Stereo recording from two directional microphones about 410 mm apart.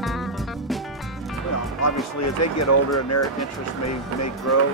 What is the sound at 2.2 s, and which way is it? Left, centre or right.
Speech, left.